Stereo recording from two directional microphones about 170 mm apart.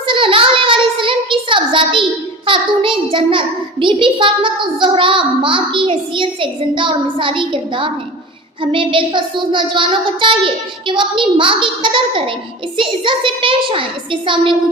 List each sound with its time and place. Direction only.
0.1 s child singing: 30° right (ahead or behind)
2.5 s a child's voice: 30° right (ahead or behind)